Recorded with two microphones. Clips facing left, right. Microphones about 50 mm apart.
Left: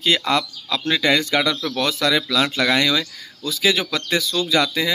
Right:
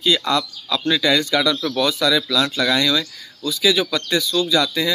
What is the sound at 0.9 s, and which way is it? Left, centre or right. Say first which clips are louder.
Speech: even; left.